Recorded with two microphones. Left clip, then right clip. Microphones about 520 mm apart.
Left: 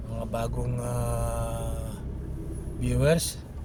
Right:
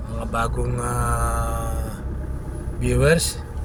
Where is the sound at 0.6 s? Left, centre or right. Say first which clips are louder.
Right 7 dB; left.